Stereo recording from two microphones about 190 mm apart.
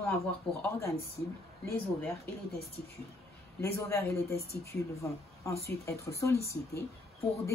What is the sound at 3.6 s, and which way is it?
Speech, 15° left (ahead or behind).